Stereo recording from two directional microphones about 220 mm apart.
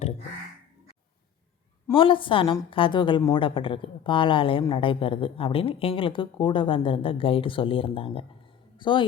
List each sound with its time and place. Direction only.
1.9 s a woman's voice: 25° left (ahead or behind)